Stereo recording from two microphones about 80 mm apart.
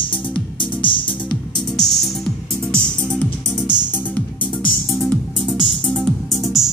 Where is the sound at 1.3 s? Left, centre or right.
Centre.